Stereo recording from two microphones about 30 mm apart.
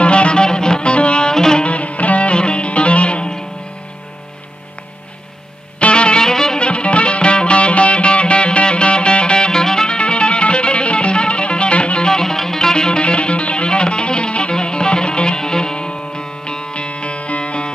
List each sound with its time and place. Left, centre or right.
0.0 s music: left
1.3 s music: centre
1.6 s music: left
5.8 s music: left
6.2 s music: left
6.6 s music: left
9.8 s music: left
12.1 s music: left